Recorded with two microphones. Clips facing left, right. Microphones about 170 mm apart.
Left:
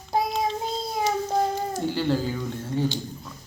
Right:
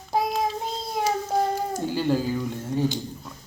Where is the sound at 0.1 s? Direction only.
Centre (ahead or behind).